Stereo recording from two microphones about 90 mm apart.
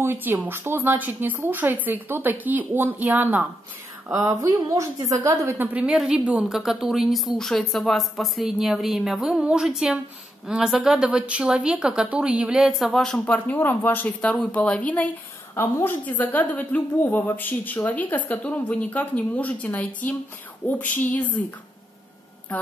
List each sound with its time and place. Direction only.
0.0 s a woman's voice: 25° right (ahead or behind)
4.1 s a woman's voice: 40° right (ahead or behind)
5.7 s a woman's voice: 10° right (ahead or behind); by 15.0 s 15° left (ahead or behind)
15.5 s a woman's voice: 25° left (ahead or behind)